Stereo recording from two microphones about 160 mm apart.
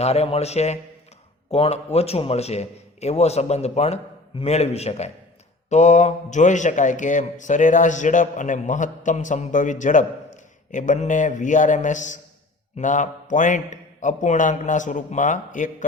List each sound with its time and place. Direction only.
0.0 s a man's voice: 40° left (ahead or behind)